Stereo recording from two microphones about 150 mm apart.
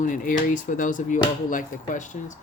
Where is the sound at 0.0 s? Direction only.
60° left (ahead or behind).